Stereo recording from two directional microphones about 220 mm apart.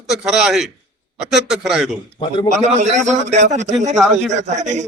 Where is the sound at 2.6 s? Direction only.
30° right (ahead or behind).